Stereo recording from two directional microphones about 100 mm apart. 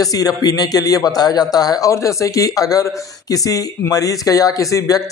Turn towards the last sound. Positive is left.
turn(degrees=35)  # may be behind; listen again after turning